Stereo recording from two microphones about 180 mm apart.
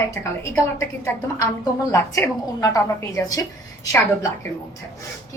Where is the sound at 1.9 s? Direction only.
20° left (ahead or behind).